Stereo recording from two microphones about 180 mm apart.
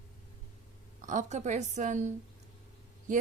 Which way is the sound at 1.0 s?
45° right (ahead or behind).